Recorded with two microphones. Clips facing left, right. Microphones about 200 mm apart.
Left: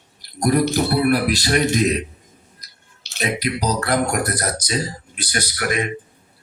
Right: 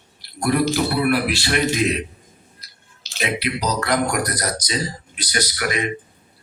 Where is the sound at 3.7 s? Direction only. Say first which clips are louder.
Left 1 dB; 30° left (ahead or behind).